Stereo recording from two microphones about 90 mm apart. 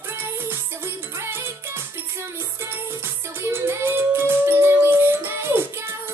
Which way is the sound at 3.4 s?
25° right (ahead or behind).